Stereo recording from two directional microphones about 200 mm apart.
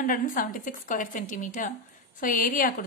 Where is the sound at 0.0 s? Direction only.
45° left (ahead or behind).